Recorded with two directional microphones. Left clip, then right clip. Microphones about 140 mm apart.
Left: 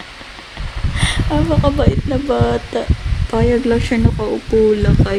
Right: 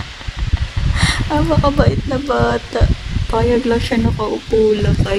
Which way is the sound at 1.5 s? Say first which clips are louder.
Right 1 dB; 10° left (ahead or behind).